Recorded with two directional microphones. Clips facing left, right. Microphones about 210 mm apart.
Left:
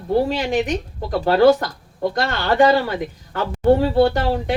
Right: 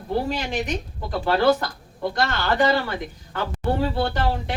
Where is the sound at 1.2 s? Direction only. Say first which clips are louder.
Left 6 dB; 40° left (ahead or behind).